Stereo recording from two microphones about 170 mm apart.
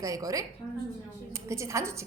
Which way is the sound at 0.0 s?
20° right (ahead or behind).